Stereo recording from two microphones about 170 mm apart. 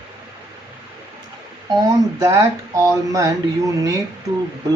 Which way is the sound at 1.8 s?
15° right (ahead or behind).